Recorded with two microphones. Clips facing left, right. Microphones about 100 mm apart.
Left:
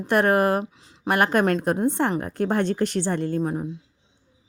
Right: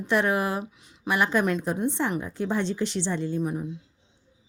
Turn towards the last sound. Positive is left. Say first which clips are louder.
# left 3 dB
turn(degrees=35)  # may be behind; listen again after turning